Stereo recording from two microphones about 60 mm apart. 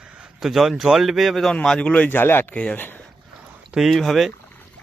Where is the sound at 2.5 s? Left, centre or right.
Left.